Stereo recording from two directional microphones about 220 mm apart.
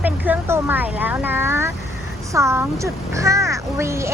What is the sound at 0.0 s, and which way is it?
Vehicle, 10° right (ahead or behind).